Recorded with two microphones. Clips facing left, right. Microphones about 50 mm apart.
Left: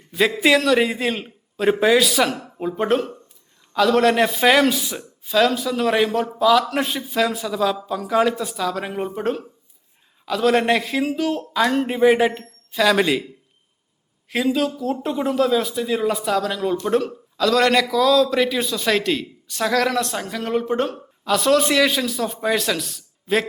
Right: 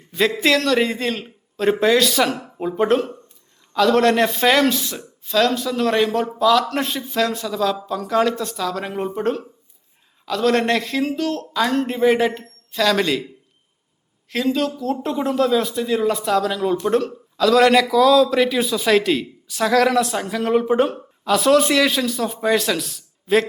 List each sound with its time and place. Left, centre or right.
0.1 s a man's voice: centre
14.3 s a man's voice: centre